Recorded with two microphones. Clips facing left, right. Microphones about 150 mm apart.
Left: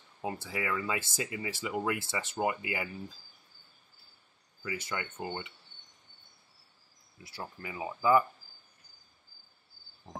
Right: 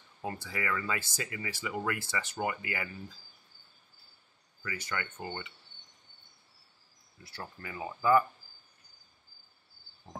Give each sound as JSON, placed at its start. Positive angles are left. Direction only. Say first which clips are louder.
{"t": 0.2, "sound": "speech", "louder": "left 1 dB", "side_deg": 20}
{"t": 4.6, "sound": "speech", "louder": "left 1 dB", "side_deg": 20}
{"t": 7.6, "sound": "speech", "louder": "left 1 dB", "side_deg": 15}